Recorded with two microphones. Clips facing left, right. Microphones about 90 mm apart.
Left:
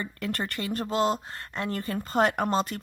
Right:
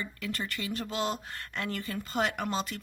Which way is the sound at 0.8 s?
35° left (ahead or behind).